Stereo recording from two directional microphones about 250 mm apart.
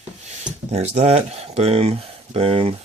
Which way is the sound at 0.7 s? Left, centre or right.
Right.